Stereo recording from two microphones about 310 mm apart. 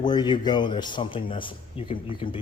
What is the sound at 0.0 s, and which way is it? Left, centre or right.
Speech, centre.